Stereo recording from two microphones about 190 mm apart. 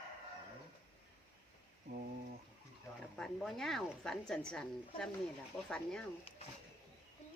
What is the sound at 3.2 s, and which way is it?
A woman's voice, centre (ahead or behind).